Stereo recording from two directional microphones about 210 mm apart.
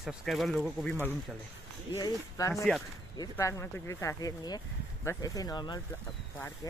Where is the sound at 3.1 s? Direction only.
15° left (ahead or behind).